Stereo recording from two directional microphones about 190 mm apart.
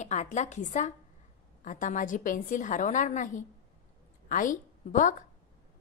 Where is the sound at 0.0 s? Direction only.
40° left (ahead or behind).